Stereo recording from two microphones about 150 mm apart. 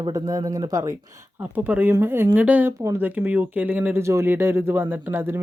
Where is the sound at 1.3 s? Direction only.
10° right (ahead or behind).